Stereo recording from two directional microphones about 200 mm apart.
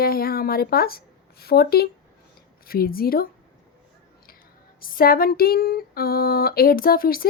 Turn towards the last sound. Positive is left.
turn(degrees=45)  # may be behind; listen again after turning